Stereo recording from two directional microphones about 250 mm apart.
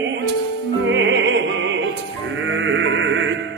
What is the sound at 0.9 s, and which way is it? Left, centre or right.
Music, right.